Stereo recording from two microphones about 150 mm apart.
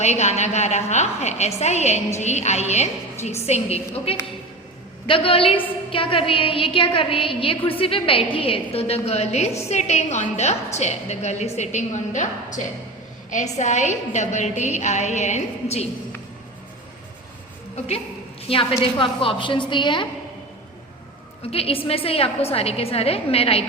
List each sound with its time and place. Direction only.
0.0 s a woman's voice: 50° left (ahead or behind)
18.4 s a woman's voice: 40° left (ahead or behind)
21.5 s a woman's voice: 40° left (ahead or behind)